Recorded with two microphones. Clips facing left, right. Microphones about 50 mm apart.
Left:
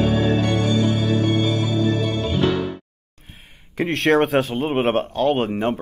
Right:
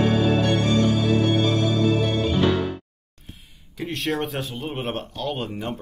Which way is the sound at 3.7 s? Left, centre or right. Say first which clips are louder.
Left 9 dB; left.